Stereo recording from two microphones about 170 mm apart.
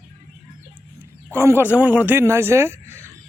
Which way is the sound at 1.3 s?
15° right (ahead or behind).